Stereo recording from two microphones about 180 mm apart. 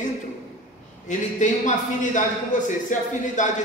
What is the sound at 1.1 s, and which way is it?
A man's voice, 40° left (ahead or behind).